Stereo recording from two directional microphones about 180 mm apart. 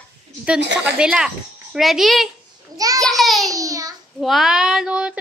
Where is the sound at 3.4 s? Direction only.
20° right (ahead or behind).